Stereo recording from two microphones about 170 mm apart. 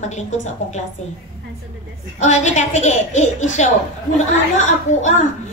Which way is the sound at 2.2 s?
45° left (ahead or behind).